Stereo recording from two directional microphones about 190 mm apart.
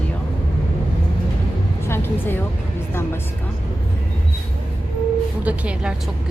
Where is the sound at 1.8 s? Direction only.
10° left (ahead or behind).